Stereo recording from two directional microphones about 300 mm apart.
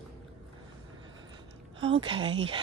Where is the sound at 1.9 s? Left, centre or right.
Centre.